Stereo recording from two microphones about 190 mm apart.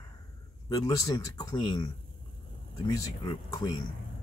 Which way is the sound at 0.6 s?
20° left (ahead or behind).